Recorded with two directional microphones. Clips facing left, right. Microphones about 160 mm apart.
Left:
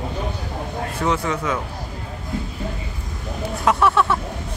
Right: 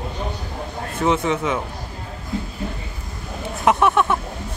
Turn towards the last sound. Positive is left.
turn(degrees=-20)  # may be behind; listen again after turning